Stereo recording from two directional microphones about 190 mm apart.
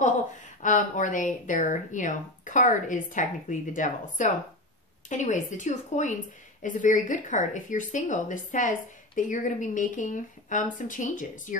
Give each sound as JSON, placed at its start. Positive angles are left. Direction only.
{"t": 0.6, "sound": "a woman's voice", "side_deg": 40}